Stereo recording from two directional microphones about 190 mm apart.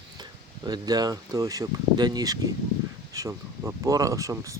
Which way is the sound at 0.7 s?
20° right (ahead or behind).